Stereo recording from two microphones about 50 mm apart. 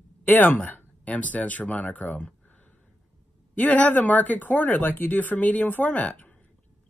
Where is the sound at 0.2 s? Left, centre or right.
Left.